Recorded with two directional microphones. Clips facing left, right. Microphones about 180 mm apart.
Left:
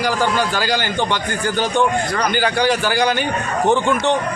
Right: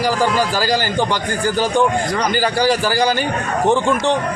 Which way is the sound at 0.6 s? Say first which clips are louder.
Right 2 dB; 35° right (ahead or behind).